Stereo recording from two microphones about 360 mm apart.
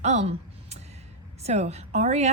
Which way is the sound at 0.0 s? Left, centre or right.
Centre.